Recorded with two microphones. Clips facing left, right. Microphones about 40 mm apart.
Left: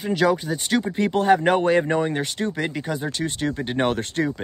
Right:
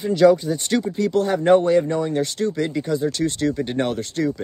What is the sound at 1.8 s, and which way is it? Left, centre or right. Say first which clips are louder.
Speech: right 1 dB; left.